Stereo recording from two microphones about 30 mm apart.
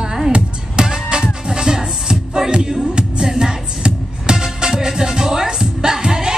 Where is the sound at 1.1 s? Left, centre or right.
Right.